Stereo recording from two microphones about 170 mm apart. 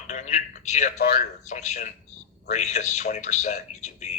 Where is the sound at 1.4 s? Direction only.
45° left (ahead or behind).